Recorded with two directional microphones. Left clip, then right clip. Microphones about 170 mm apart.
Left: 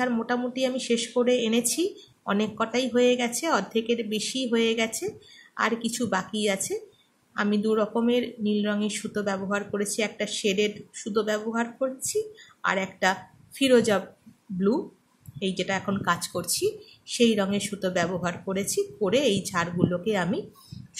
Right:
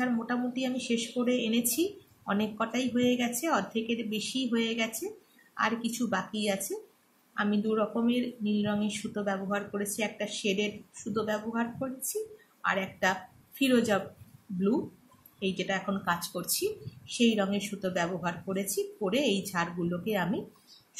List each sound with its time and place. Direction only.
0.0 s speech: 40° left (ahead or behind)
15.3 s speech: 40° left (ahead or behind)